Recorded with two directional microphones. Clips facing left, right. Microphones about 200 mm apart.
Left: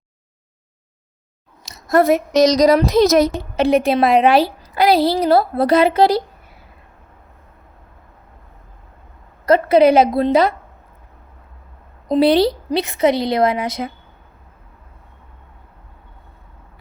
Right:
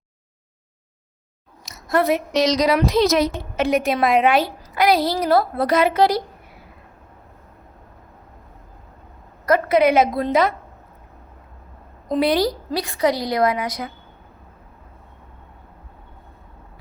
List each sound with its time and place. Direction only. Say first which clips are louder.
1.9 s a woman's voice: left 5 dB; 45° left (ahead or behind)
3.5 s a woman's voice: left 5 dB; 30° left (ahead or behind)
9.5 s a woman's voice: left 4 dB; 30° left (ahead or behind)
12.0 s a woman's voice: left 5 dB; 30° left (ahead or behind)